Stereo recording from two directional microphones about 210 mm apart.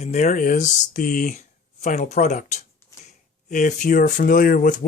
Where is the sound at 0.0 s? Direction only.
35° left (ahead or behind).